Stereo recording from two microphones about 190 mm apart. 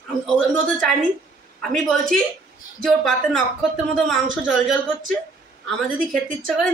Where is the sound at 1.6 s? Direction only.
5° left (ahead or behind).